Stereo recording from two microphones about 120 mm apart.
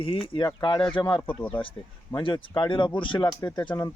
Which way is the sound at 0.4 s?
40° left (ahead or behind).